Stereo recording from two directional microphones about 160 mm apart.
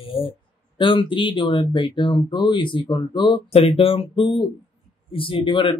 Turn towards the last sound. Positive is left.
turn(degrees=30)  # may be behind; listen again after turning